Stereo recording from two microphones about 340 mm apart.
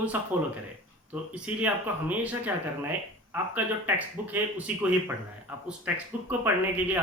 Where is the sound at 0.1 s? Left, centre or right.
Centre.